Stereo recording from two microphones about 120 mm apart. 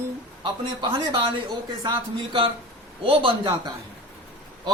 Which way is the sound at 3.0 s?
50° right (ahead or behind).